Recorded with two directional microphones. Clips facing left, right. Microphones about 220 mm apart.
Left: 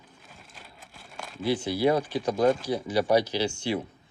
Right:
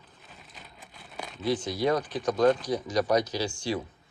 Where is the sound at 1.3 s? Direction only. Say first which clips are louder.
Left 2 dB; 5° left (ahead or behind).